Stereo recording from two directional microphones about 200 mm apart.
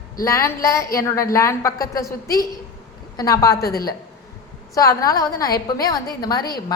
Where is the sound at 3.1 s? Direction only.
15° left (ahead or behind).